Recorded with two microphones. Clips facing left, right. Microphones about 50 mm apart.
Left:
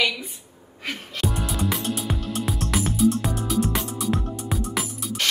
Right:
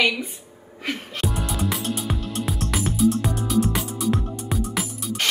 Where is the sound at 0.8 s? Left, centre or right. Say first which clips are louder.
Right 1 dB; centre.